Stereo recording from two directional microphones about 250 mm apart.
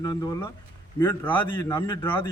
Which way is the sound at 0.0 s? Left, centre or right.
Centre.